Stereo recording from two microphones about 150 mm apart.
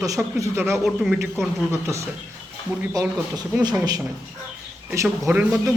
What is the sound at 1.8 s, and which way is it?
Speech, 20° right (ahead or behind).